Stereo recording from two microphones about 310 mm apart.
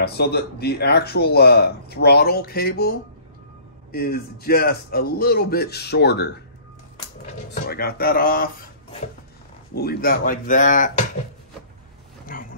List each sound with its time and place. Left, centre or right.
0.0 s speech: left
7.5 s speech: left
12.3 s roaring cats: left